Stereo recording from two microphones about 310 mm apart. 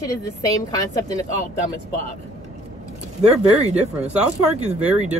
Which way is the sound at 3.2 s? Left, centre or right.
Right.